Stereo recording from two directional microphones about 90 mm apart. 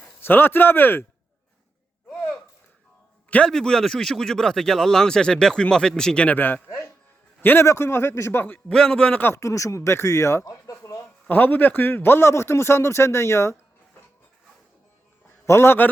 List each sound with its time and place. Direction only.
0.0 s speech: 25° left (ahead or behind)
3.2 s a man's voice: 15° left (ahead or behind)
6.7 s music: 35° left (ahead or behind)
7.4 s a man's voice: 25° left (ahead or behind)
8.7 s a man's voice: 10° left (ahead or behind)
9.3 s speech: 35° left (ahead or behind)
11.3 s speech: 20° left (ahead or behind)
15.4 s speech: 25° left (ahead or behind)